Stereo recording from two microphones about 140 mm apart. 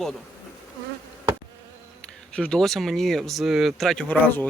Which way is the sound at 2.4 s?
5° left (ahead or behind).